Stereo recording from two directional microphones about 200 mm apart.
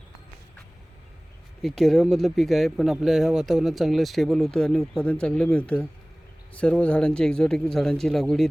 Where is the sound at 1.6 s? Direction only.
Centre (ahead or behind).